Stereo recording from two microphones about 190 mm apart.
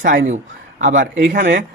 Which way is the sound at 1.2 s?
70° right (ahead or behind).